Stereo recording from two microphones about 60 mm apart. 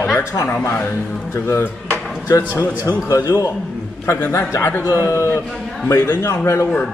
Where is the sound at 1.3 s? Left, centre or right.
Left.